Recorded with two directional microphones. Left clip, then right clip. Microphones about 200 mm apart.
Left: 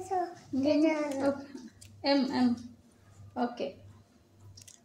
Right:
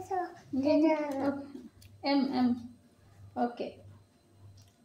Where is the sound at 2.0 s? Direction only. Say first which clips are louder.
Left 1 dB; 25° left (ahead or behind).